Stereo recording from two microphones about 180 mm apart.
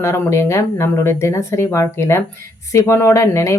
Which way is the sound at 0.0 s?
15° left (ahead or behind).